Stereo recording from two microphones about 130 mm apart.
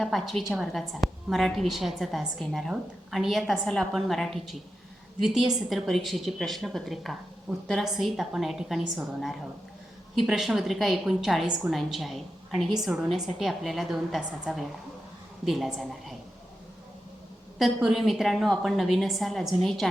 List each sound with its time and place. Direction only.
0.0 s a woman's voice: centre (ahead or behind)
5.6 s a woman's voice: centre (ahead or behind)
17.6 s a woman's voice: 5° right (ahead or behind)